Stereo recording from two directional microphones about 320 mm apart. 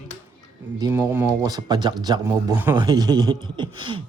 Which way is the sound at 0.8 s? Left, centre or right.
Centre.